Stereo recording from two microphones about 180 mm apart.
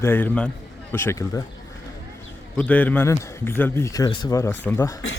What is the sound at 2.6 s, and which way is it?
Speech, 10° left (ahead or behind).